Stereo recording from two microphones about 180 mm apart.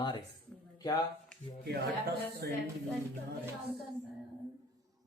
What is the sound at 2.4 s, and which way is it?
Speech, 60° right (ahead or behind).